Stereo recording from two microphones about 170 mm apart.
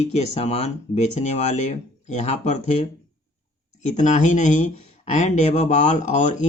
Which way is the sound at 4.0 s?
45° left (ahead or behind).